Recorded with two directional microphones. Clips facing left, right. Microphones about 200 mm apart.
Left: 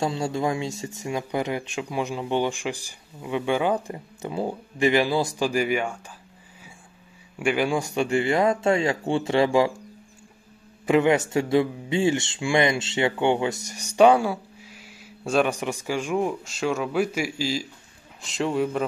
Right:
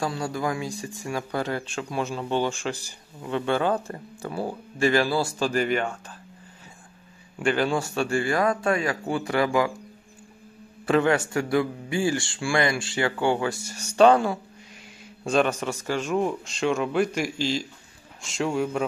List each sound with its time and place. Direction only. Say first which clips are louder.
0.0 s speech: left 3 dB; 25° left (ahead or behind)
7.3 s speech: even; 10° left (ahead or behind)
10.9 s speech: left 2 dB; 15° left (ahead or behind); by 18.9 s centre (ahead or behind)